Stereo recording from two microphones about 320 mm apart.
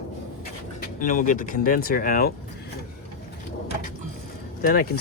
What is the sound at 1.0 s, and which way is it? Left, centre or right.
Speech, left.